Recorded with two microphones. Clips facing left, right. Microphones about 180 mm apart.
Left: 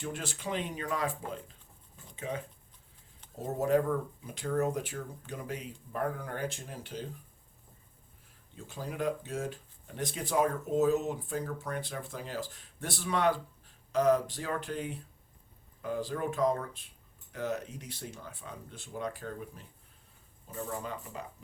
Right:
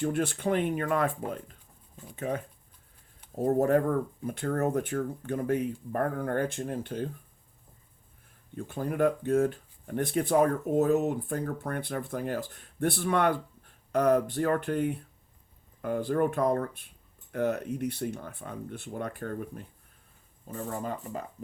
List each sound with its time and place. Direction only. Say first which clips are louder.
0.0 s speech: right 10 dB; 55° right (ahead or behind)
3.4 s speech: right 4 dB; 55° right (ahead or behind)
8.5 s speech: right 8 dB; 55° right (ahead or behind)